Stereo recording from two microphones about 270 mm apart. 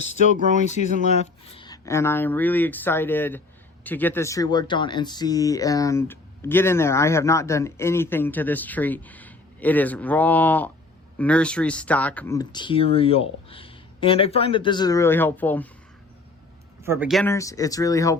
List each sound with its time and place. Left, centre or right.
0.0 s speech: left; by 15.6 s centre
16.8 s speech: centre
17.3 s speech: centre